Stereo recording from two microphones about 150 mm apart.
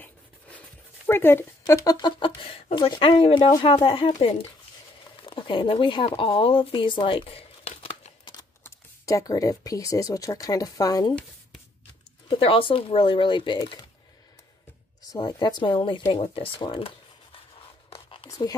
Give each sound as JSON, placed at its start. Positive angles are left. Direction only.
{"t": 1.0, "sound": "speech", "side_deg": 15}
{"t": 8.3, "sound": "speech", "side_deg": 20}
{"t": 12.3, "sound": "speech", "side_deg": 35}
{"t": 15.1, "sound": "speech", "side_deg": 25}
{"t": 17.8, "sound": "a sound", "side_deg": 40}